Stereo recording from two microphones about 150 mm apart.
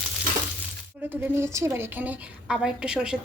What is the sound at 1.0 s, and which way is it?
A woman's voice, 15° right (ahead or behind).